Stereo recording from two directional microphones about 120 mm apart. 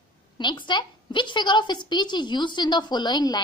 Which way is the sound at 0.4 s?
40° left (ahead or behind).